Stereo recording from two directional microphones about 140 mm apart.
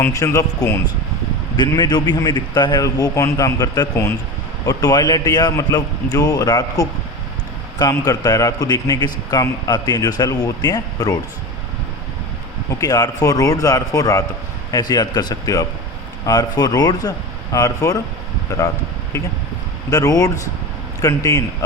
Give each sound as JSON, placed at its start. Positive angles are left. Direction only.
{"t": 0.0, "sound": "a man's voice", "side_deg": 25}
{"t": 12.8, "sound": "a man's voice", "side_deg": 25}
{"t": 19.9, "sound": "a man's voice", "side_deg": 25}